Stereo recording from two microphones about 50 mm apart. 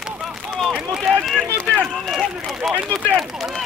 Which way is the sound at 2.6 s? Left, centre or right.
Centre.